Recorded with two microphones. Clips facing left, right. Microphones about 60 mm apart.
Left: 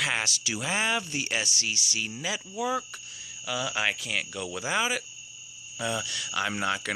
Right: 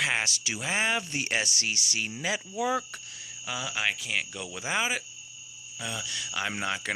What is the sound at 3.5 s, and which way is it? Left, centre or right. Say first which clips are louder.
Speech: left 2 dB; centre.